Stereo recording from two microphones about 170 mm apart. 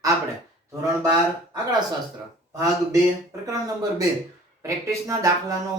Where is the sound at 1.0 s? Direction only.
20° right (ahead or behind).